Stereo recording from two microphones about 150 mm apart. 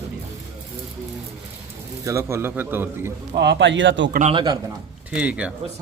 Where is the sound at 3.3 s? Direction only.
90° right.